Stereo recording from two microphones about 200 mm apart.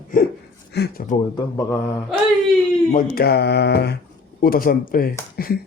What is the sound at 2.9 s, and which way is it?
Speech, 50° left (ahead or behind).